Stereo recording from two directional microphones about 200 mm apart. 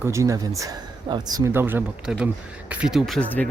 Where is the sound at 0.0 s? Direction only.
15° right (ahead or behind).